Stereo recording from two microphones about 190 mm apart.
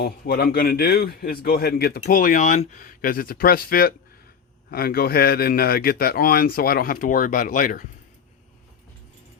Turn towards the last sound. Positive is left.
turn(degrees=45)  # may be behind; listen again after turning